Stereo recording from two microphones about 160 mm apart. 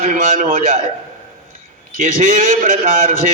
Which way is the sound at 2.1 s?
55° right (ahead or behind).